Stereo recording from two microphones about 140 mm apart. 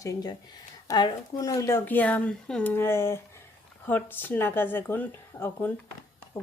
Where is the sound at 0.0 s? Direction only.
25° left (ahead or behind).